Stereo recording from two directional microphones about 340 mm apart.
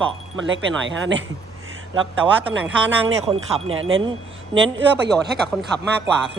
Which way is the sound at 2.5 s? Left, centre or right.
Right.